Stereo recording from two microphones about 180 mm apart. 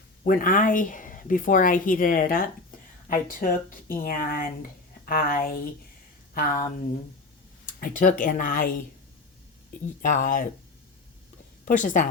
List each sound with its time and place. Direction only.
0.3 s speech: 50° left (ahead or behind)
7.7 s speech: 50° left (ahead or behind)
9.8 s speech: 45° left (ahead or behind)
11.6 s a woman's voice: 45° left (ahead or behind)